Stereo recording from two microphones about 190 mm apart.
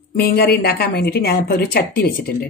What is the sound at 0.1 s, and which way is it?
A woman's voice, 55° left (ahead or behind).